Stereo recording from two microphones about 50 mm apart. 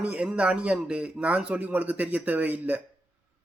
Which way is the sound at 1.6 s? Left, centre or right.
Right.